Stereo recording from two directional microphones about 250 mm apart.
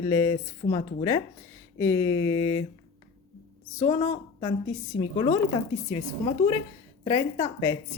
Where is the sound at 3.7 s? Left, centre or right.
Left.